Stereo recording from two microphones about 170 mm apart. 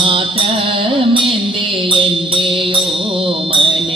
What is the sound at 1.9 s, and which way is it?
Music, 30° right (ahead or behind).